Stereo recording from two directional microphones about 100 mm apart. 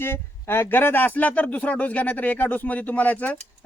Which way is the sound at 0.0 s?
25° left (ahead or behind).